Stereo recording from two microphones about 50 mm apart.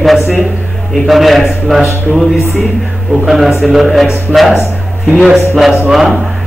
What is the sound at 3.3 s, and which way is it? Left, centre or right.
A man's voice, centre.